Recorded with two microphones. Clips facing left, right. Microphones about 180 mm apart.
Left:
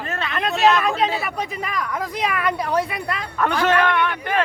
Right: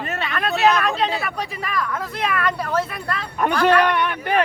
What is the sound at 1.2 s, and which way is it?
Speech, 15° left (ahead or behind).